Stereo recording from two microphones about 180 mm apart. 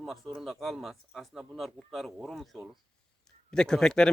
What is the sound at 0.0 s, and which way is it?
Speech, centre (ahead or behind).